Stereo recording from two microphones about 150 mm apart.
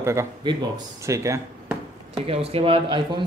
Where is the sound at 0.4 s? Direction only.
30° right (ahead or behind).